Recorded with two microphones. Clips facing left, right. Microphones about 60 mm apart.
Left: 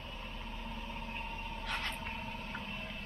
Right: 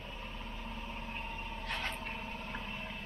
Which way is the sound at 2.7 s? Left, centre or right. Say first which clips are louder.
Right 1 dB; centre.